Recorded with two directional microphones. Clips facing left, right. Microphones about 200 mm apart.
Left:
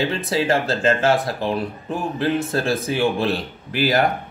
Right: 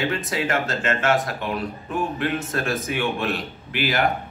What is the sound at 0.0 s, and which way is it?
Speech, 30° left (ahead or behind).